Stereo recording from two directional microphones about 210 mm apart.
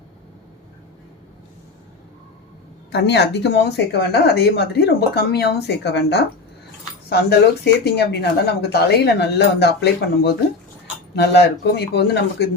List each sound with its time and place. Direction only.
2.9 s speech: 55° left (ahead or behind)